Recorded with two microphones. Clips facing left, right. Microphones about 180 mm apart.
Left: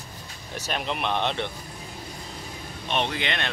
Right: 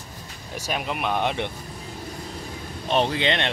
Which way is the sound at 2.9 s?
35° right (ahead or behind).